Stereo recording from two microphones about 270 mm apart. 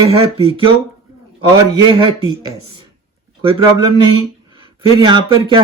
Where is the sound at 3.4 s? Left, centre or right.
Centre.